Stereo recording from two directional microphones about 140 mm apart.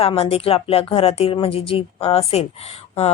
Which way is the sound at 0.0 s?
45° left (ahead or behind).